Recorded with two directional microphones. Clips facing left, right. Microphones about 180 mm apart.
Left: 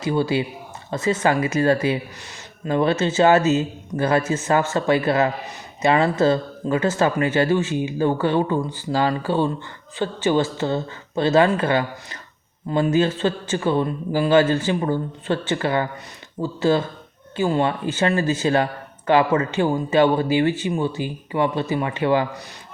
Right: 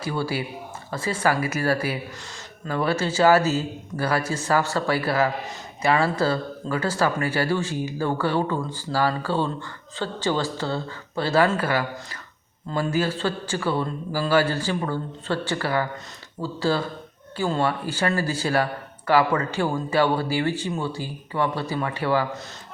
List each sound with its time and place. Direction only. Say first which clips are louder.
0.0 s a woman's voice: left 6 dB; 20° left (ahead or behind)